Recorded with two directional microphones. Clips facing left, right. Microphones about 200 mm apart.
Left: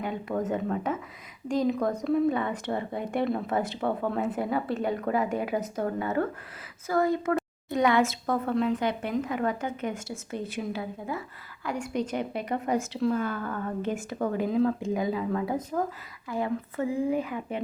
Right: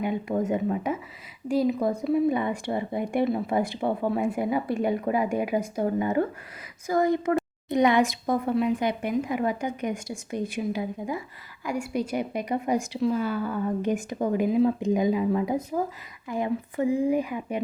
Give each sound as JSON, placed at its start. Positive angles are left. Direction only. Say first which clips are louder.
{"t": 0.0, "sound": "a woman's voice", "louder": "right 4 dB", "side_deg": -15}